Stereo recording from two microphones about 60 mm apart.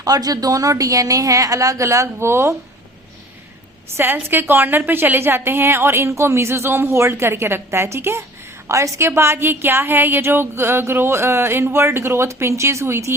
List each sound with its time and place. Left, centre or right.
0.0 s a woman's voice: right
3.9 s a woman's voice: right
8.6 s a woman's voice: right